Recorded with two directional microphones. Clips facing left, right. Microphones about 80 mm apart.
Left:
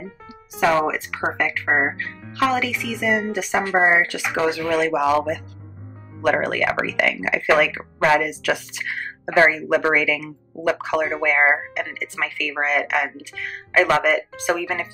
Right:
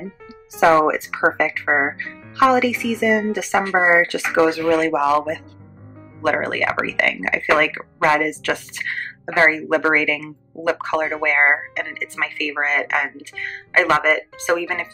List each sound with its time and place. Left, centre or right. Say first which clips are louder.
0.7 s speech: right 5 dB; right
1.1 s speech: right 4 dB; centre